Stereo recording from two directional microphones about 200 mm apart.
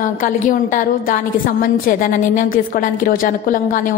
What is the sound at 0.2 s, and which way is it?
A woman's voice, 40° left (ahead or behind).